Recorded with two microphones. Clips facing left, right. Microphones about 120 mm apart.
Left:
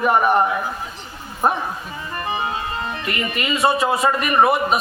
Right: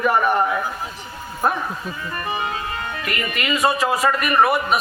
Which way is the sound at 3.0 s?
25° left (ahead or behind).